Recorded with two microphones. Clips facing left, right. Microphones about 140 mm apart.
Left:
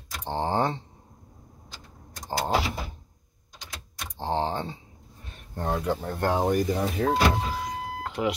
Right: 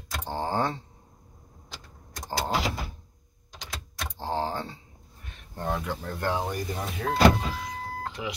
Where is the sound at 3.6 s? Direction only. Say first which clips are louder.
Right 3 dB; 90° right.